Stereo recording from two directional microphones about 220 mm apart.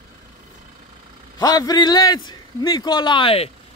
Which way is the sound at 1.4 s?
15° left (ahead or behind).